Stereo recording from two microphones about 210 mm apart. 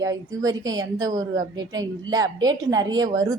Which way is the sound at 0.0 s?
15° right (ahead or behind).